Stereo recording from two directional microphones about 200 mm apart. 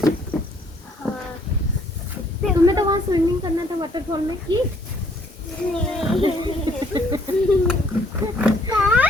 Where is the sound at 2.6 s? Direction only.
20° right (ahead or behind).